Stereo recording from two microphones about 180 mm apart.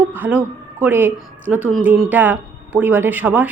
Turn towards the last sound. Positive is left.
turn(degrees=-10)  # may be behind; listen again after turning